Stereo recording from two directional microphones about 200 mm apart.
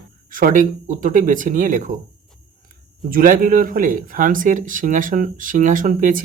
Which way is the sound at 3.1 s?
45° right (ahead or behind).